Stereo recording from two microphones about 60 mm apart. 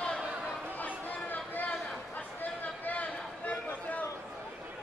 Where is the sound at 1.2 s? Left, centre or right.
Left.